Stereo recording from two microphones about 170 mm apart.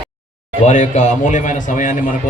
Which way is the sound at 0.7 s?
45° left (ahead or behind).